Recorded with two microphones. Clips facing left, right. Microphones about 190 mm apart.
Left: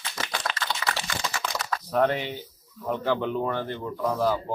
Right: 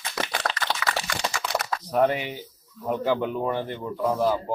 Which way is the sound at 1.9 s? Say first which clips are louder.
Right 1 dB; 10° right (ahead or behind).